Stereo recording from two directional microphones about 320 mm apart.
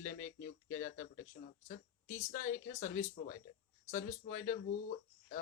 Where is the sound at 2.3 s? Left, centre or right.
Left.